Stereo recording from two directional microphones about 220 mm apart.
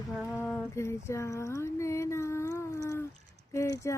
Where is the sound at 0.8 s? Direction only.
15° left (ahead or behind).